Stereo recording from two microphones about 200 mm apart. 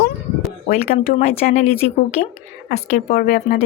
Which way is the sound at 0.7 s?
35° left (ahead or behind).